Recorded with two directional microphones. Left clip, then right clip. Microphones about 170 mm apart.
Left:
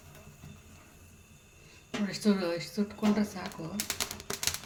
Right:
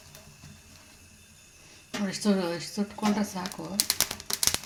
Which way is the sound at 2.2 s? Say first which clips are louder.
Right 1 dB; 50° right (ahead or behind).